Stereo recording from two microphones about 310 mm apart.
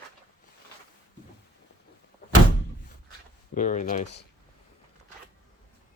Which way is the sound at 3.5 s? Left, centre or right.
Left.